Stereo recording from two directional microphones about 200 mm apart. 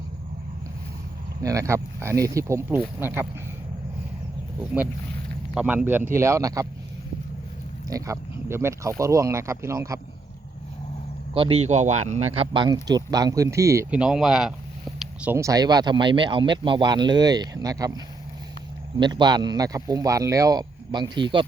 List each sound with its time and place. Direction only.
1.4 s speech: 15° right (ahead or behind)
5.5 s speech: 10° right (ahead or behind)
7.9 s speech: 15° right (ahead or behind)
11.3 s speech: 30° right (ahead or behind)
14.0 s speech: centre (ahead or behind); by 21.4 s 25° right (ahead or behind)